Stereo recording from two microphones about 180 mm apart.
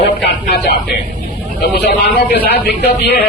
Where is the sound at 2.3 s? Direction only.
60° left (ahead or behind).